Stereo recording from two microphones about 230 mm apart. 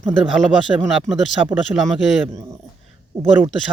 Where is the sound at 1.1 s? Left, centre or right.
Centre.